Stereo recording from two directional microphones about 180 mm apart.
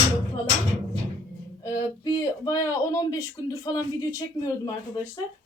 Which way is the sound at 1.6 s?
20° left (ahead or behind).